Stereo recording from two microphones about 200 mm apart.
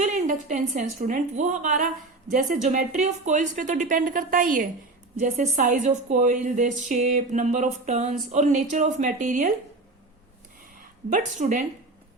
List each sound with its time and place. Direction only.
0.0 s a woman's voice: 40° right (ahead or behind)
11.1 s a woman's voice: 40° right (ahead or behind)